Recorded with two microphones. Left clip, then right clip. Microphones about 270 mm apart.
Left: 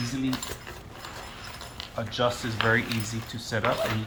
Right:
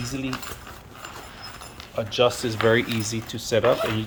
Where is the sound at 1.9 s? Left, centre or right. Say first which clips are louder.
Right 6 dB; right.